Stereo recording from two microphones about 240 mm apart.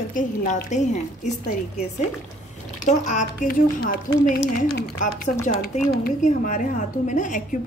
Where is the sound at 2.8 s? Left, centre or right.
Left.